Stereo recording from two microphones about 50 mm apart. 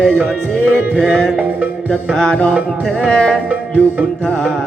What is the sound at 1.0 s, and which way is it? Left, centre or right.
Music, centre.